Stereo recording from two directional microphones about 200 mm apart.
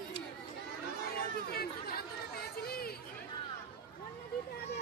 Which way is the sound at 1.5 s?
50° left (ahead or behind).